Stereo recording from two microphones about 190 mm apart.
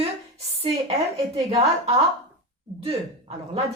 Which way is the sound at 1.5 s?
30° right (ahead or behind).